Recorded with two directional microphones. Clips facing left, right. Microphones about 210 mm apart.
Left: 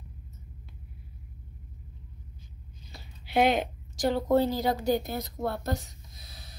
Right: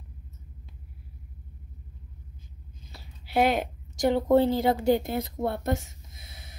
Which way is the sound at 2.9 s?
5° right (ahead or behind).